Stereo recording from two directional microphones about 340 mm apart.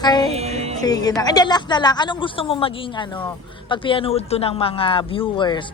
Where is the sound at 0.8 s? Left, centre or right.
Centre.